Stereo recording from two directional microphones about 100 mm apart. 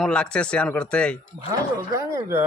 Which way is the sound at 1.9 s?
35° right (ahead or behind).